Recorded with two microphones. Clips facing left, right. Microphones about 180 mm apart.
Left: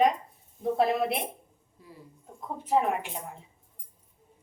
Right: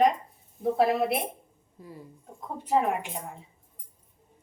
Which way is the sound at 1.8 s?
45° right (ahead or behind).